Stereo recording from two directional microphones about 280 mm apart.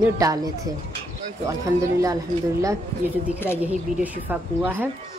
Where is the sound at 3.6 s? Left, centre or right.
Centre.